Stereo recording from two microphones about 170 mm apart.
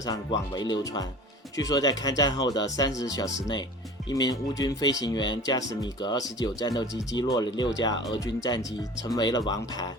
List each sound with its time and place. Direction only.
0.0 s speech: 25° left (ahead or behind)